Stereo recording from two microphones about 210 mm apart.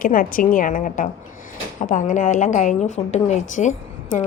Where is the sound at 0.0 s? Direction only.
40° left (ahead or behind).